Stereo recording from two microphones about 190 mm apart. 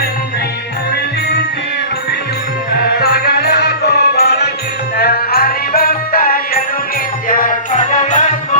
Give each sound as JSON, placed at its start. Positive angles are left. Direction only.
{"t": 2.8, "sound": "music", "side_deg": 55}